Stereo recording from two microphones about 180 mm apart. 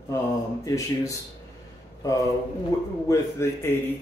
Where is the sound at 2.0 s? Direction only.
20° left (ahead or behind).